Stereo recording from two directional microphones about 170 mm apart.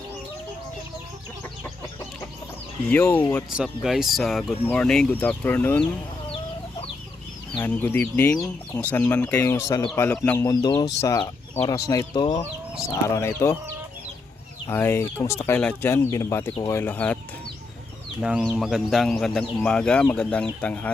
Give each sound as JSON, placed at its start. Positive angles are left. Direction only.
{"t": 2.8, "sound": "speech", "side_deg": 10}
{"t": 3.5, "sound": "speech", "side_deg": -5}
{"t": 7.6, "sound": "speech", "side_deg": 10}
{"t": 14.7, "sound": "speech", "side_deg": 15}
{"t": 18.2, "sound": "speech", "side_deg": -5}